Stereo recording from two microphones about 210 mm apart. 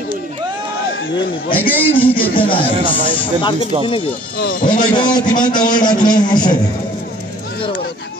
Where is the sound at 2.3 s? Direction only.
25° left (ahead or behind).